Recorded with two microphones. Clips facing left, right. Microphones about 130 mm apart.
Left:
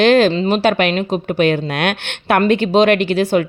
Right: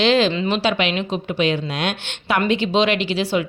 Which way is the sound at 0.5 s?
50° left (ahead or behind).